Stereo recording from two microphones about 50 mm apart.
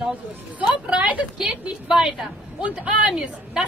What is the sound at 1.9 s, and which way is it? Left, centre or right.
A woman's voice, centre.